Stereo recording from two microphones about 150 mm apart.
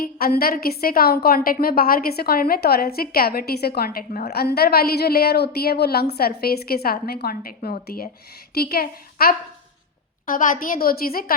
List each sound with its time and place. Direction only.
0.0 s a woman's voice: 80° left
10.2 s a woman's voice: 60° left (ahead or behind)